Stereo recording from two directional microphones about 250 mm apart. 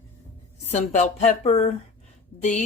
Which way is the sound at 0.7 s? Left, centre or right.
Left.